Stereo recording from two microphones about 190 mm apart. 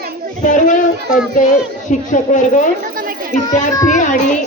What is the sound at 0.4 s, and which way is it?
Speech, 40° left (ahead or behind).